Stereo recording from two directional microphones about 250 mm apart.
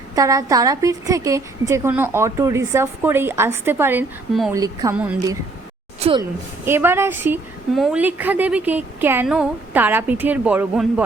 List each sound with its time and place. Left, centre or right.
0.2 s a woman's voice: centre
6.0 s speech: right
6.7 s a woman's voice: centre